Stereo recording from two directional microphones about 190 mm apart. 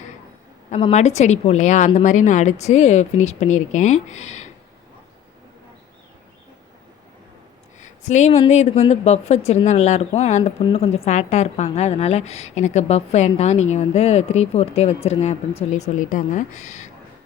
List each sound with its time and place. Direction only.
0.7 s a woman's voice: 35° left (ahead or behind)
7.8 s a woman's voice: 40° left (ahead or behind)